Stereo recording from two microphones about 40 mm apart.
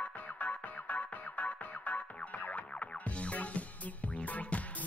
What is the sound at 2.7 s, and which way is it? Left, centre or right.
Music, left.